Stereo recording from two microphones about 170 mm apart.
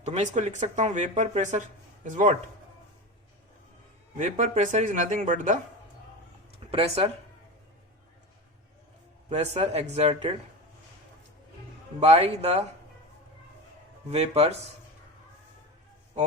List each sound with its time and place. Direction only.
0.0 s speech: 40° right (ahead or behind)
4.2 s speech: 45° right (ahead or behind)
6.7 s speech: 35° right (ahead or behind)
9.3 s speech: 40° right (ahead or behind)
11.9 s speech: 40° right (ahead or behind)
14.1 s speech: 35° right (ahead or behind)